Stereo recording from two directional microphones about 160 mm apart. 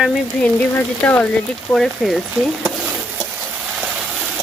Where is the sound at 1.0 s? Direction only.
10° left (ahead or behind).